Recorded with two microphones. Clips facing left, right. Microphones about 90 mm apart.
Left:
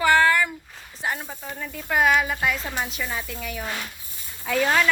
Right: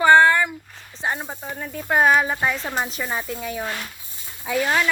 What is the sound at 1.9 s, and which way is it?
Speech, 35° right (ahead or behind).